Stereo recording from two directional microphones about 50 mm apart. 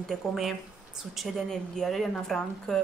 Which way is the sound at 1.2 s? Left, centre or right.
Centre.